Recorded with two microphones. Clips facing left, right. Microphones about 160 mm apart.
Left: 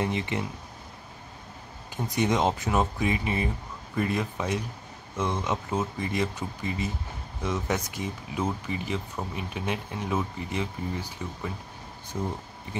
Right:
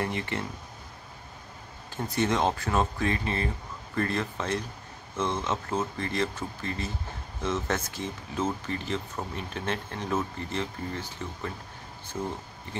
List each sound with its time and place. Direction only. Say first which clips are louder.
0.0 s speech: left 2 dB; 20° left (ahead or behind)
2.0 s speech: left 1 dB; 15° left (ahead or behind)